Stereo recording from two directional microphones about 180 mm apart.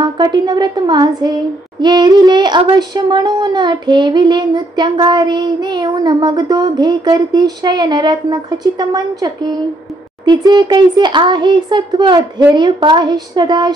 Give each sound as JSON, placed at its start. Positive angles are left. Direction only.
{"t": 0.0, "sound": "speech", "side_deg": -25}